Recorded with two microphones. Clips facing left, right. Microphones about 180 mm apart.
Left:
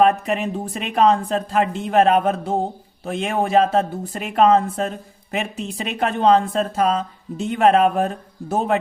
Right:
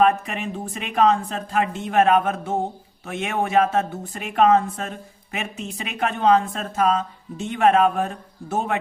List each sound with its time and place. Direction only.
0.0 s speech: 35° left (ahead or behind)